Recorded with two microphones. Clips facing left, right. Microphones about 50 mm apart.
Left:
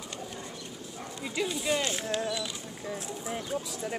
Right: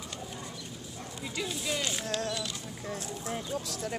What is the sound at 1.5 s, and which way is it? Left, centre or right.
Speech, centre.